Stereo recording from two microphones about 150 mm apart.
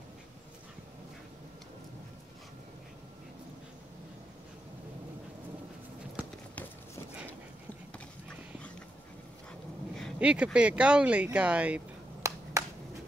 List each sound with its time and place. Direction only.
10.1 s speech: 10° right (ahead or behind)
12.2 s finger snapping: 20° right (ahead or behind)